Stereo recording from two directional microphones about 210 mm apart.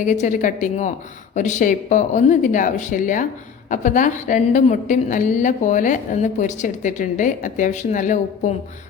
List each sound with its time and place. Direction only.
0.0 s a woman's voice: 35° left (ahead or behind)